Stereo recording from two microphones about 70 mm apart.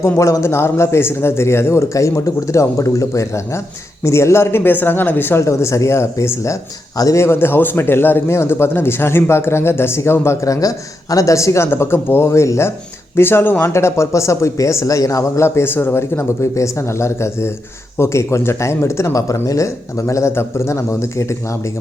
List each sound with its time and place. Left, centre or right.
0.0 s speech: left
7.2 s speech: left
15.4 s speech: left